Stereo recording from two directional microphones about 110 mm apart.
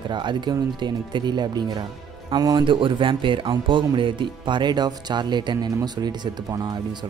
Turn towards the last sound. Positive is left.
turn(degrees=-40)  # may be behind; listen again after turning